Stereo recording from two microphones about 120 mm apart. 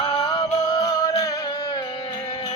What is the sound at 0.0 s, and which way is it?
Music, 45° left (ahead or behind).